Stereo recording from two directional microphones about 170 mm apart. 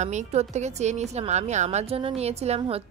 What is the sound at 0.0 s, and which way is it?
A woman's voice, 45° right (ahead or behind).